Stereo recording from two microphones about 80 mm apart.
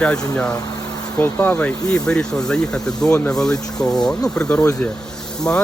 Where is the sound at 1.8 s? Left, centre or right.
Centre.